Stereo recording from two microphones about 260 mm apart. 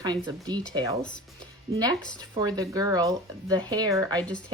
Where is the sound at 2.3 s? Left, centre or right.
Centre.